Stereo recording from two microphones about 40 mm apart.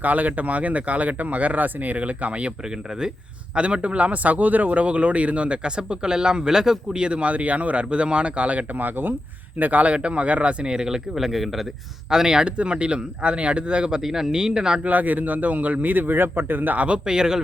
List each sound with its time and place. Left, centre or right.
0.0 s a man's voice: right
3.5 s a man's voice: right
9.9 s a man's voice: right
10.6 s speech: right; by 11.6 s centre
12.1 s speech: centre
14.0 s speech: centre
14.8 s a man's voice: right
16.7 s a man's voice: right
17.1 s speech: centre